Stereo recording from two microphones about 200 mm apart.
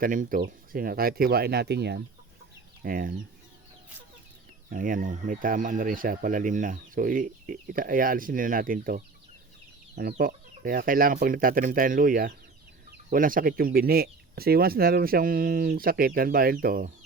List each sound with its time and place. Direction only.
0.0 s speech: 45° right (ahead or behind)
2.8 s speech: 45° right (ahead or behind)
4.7 s speech: 45° right (ahead or behind)